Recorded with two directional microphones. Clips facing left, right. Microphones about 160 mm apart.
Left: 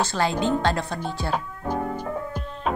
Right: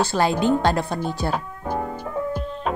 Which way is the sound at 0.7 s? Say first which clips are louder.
Right 3 dB; 30° right (ahead or behind).